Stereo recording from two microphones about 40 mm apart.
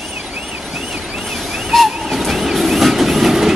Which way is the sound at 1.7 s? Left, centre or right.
Centre.